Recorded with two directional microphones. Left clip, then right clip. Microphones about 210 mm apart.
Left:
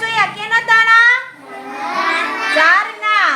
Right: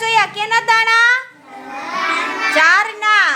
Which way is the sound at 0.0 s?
40° right (ahead or behind).